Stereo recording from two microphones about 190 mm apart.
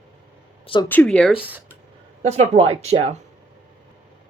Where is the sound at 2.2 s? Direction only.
35° right (ahead or behind).